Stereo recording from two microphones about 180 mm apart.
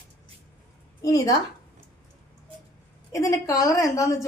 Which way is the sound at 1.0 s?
20° left (ahead or behind).